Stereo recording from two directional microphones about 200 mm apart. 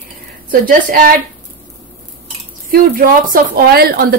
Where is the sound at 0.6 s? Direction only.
45° right (ahead or behind).